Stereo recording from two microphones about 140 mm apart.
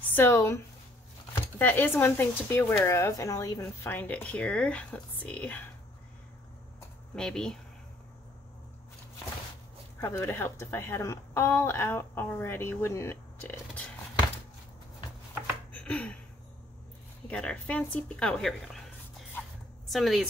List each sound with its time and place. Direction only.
0.1 s speech: 15° left (ahead or behind)
1.6 s a woman's voice: 15° left (ahead or behind)
7.2 s speech: 5° left (ahead or behind)
9.9 s a woman's voice: 20° left (ahead or behind)
15.7 s a sound: 10° left (ahead or behind)
17.3 s speech: 10° left (ahead or behind)